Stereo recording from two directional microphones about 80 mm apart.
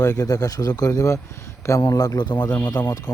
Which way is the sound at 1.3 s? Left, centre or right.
Left.